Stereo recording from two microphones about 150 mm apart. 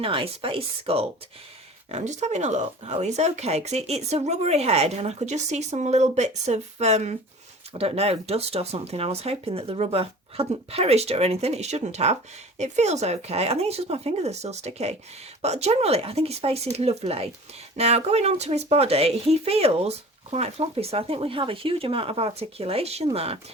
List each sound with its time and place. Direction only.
0.0 s speech: 40° right (ahead or behind)